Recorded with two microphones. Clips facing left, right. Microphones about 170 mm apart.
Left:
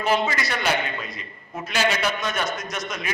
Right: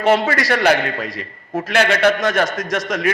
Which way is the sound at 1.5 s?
60° right (ahead or behind).